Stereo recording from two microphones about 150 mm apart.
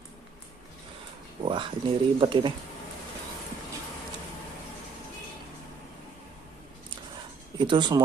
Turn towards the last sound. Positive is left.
turn(degrees=-30)  # may be behind; listen again after turning